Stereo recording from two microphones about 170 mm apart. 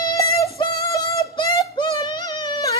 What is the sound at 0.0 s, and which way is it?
Music, 20° left (ahead or behind).